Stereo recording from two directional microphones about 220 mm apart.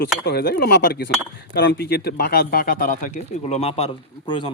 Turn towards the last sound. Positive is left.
turn(degrees=20)  # may be behind; listen again after turning